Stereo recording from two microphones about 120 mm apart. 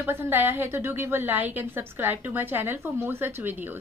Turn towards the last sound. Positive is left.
turn(degrees=-15)  # may be behind; listen again after turning